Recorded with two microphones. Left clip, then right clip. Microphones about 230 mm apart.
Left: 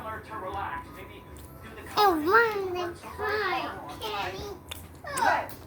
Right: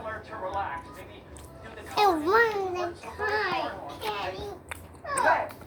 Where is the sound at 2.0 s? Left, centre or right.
Left.